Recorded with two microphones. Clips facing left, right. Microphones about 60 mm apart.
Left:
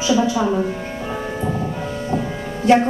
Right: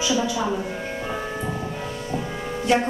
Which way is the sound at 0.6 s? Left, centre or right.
Centre.